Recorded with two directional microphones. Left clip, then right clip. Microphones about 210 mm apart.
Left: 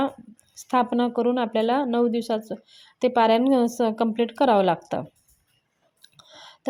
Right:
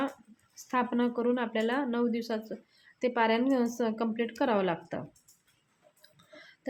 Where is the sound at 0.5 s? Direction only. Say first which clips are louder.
Left 8 dB; 35° left (ahead or behind).